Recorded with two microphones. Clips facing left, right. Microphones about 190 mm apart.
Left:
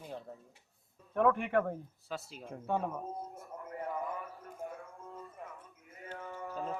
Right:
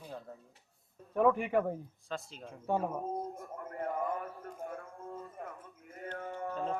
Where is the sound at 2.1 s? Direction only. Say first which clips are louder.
Right 1 dB; 5° left (ahead or behind).